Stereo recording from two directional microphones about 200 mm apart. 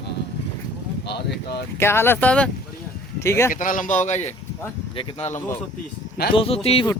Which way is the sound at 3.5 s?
40° left (ahead or behind).